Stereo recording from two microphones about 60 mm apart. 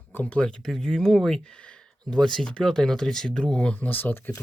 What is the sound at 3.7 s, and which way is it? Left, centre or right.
Speech, left.